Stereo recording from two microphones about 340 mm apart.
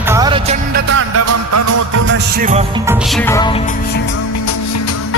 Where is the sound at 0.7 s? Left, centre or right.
Right.